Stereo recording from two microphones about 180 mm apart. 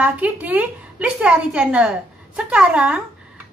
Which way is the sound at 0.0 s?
10° right (ahead or behind).